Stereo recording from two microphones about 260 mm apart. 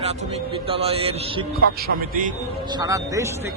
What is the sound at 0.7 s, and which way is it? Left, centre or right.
Speech, right.